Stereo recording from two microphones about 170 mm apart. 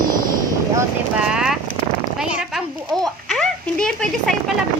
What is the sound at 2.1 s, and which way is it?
A child's voice, 5° right (ahead or behind).